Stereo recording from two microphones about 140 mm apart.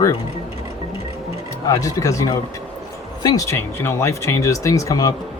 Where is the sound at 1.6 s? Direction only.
25° left (ahead or behind).